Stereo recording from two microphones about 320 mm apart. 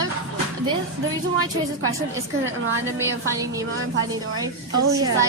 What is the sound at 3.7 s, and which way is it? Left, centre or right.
Speech, right.